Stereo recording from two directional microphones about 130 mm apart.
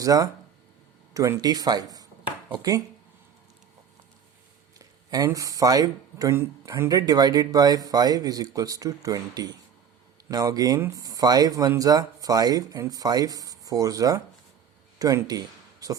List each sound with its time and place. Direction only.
0.0 s speech: 25° right (ahead or behind)
4.8 s speech: 25° right (ahead or behind)